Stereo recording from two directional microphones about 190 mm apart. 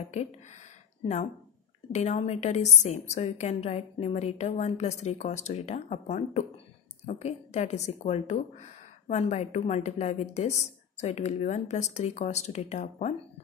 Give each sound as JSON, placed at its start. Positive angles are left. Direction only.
{"t": 0.1, "sound": "a woman's voice", "side_deg": 35}
{"t": 1.9, "sound": "a woman's voice", "side_deg": 35}